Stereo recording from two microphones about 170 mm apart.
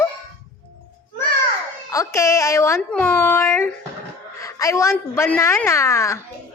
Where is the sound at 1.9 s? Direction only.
15° left (ahead or behind).